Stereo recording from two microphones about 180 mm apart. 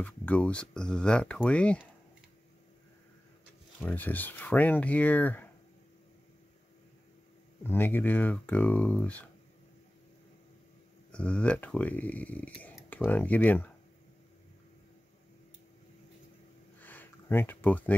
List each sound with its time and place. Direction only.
0.0 s speech: 10° left (ahead or behind)
3.8 s speech: 10° left (ahead or behind)
7.6 s speech: 10° left (ahead or behind)
11.1 s speech: 5° left (ahead or behind)
16.8 s a sound: 10° left (ahead or behind)